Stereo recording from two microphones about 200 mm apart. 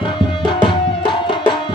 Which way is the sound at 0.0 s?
25° left (ahead or behind).